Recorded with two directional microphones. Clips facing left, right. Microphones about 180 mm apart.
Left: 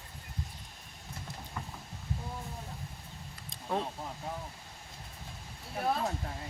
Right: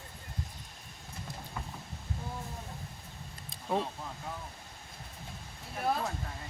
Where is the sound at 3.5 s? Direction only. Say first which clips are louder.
Right 2 dB; 10° right (ahead or behind).